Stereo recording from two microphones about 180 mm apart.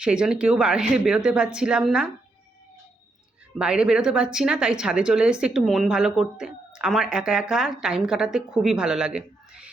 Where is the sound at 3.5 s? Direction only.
5° right (ahead or behind).